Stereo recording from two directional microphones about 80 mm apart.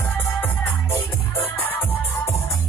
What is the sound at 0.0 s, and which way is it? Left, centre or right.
Music, left.